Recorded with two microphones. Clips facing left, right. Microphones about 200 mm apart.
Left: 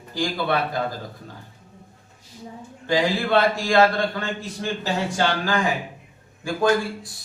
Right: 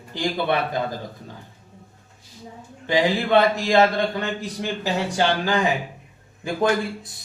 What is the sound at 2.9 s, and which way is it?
A man's voice, 20° right (ahead or behind).